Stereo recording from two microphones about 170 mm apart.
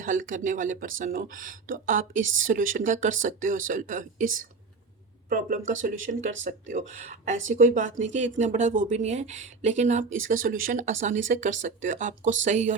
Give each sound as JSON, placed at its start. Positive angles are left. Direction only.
{"t": 0.0, "sound": "speech", "side_deg": -50}